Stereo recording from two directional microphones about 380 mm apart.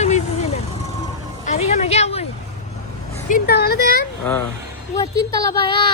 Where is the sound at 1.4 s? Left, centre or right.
Centre.